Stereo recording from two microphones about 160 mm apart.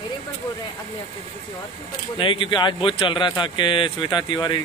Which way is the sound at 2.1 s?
30° left (ahead or behind).